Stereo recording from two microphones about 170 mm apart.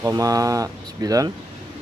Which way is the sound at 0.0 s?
20° right (ahead or behind).